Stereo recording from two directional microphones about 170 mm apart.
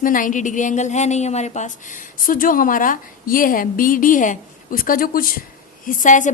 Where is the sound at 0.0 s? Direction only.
50° left (ahead or behind).